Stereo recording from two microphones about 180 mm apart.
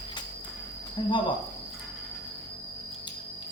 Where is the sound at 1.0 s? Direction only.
25° left (ahead or behind).